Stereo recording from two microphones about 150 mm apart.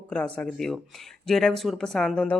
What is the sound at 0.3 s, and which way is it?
Speech, 5° left (ahead or behind).